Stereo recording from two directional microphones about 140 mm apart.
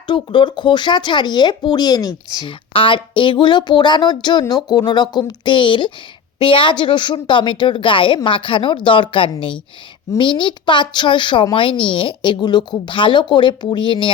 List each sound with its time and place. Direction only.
0.1 s speech: 35° left (ahead or behind)
2.5 s speech: 40° left (ahead or behind)